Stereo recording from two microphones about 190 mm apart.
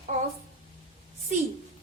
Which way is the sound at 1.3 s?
40° right (ahead or behind).